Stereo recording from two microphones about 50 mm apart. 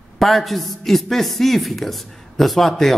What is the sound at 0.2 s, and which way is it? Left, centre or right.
A man's voice, centre.